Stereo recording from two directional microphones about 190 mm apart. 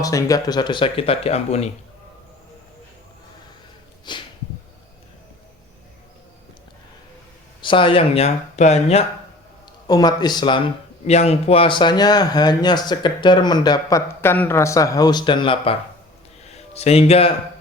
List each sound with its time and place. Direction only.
0.0 s speech: 20° left (ahead or behind); by 1.7 s 35° left (ahead or behind)
4.1 s speech: 25° left (ahead or behind)
7.6 s speech: 25° left (ahead or behind)
9.8 s speech: 20° left (ahead or behind)
11.0 s speech: 35° left (ahead or behind)